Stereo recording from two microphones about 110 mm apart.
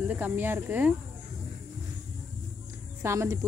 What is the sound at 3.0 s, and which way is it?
Speech, 25° right (ahead or behind).